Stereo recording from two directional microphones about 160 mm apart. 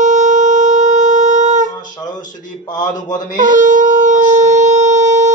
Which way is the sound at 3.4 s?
55° right (ahead or behind).